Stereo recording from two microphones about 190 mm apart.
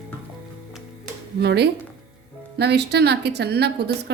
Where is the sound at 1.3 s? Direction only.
60° right (ahead or behind).